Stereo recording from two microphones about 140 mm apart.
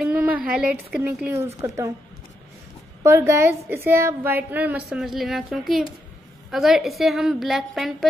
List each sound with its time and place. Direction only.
0.0 s a sound: 10° right (ahead or behind)
0.5 s speech: 10° right (ahead or behind)
3.0 s a woman's voice: 20° right (ahead or behind); by 8.1 s centre (ahead or behind)